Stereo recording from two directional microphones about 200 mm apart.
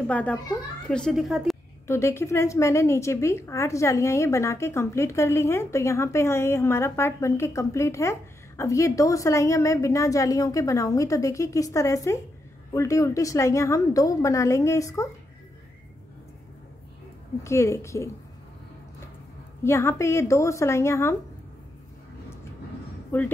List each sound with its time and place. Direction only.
0.1 s a child's voice: 5° left (ahead or behind)
1.9 s a woman's voice: 15° left (ahead or behind)
17.4 s a woman's voice: 15° left (ahead or behind)
19.6 s a woman's voice: 15° left (ahead or behind)
23.1 s a woman's voice: 10° left (ahead or behind)